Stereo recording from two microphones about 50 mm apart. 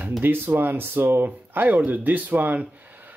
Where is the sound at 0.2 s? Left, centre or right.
Right.